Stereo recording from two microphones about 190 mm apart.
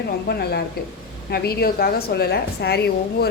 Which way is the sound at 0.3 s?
60° left (ahead or behind).